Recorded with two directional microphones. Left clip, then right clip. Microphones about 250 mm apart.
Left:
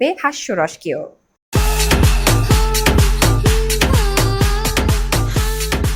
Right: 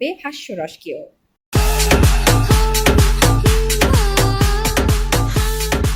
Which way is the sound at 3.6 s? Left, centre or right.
Centre.